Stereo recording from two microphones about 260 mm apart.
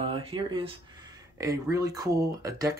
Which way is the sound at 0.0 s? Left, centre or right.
Centre.